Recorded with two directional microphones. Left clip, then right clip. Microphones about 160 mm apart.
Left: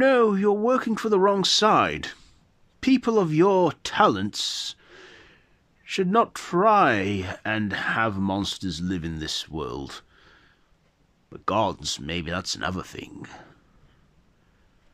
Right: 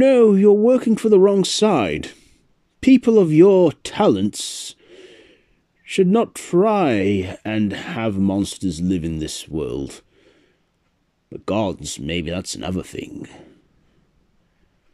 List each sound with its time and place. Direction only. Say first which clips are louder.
0.0 s speech: right 6 dB; 20° right (ahead or behind)